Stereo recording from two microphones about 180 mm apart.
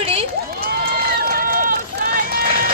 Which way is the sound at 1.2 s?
55° right (ahead or behind).